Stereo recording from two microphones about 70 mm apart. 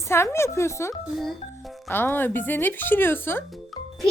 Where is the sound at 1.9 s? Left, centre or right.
Left.